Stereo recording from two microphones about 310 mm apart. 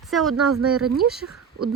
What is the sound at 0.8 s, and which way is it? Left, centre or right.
Speech, right.